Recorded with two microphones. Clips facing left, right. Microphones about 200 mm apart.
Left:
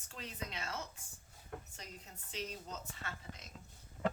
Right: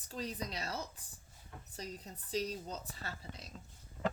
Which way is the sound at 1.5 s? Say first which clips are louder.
Left 7 dB; 60° left (ahead or behind).